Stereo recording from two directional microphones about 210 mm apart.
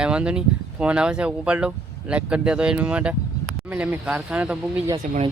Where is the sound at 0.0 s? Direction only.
5° right (ahead or behind).